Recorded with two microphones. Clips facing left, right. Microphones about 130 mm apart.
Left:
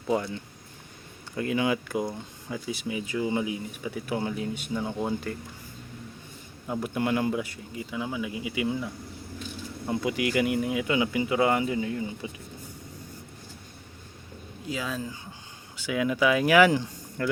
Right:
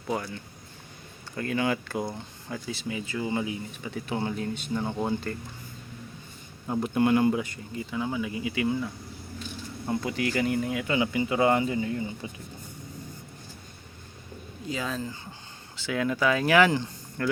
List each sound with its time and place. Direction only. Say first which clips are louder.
0.1 s speech: left 4 dB; 25° left (ahead or behind)
1.4 s speech: left 1 dB; 15° left (ahead or behind)
6.8 s speech: right 5 dB; centre (ahead or behind)
10.0 s speech: left 3 dB; 10° left (ahead or behind)
14.7 s speech: even; 5° left (ahead or behind)